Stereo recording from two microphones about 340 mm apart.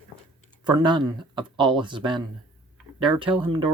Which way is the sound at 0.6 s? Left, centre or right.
Centre.